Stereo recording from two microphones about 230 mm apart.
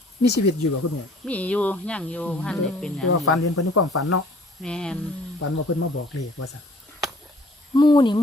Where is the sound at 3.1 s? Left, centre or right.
Left.